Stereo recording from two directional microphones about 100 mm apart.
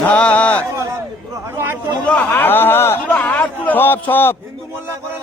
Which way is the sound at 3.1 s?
15° left (ahead or behind).